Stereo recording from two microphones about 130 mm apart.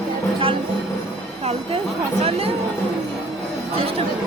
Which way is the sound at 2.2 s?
50° right (ahead or behind).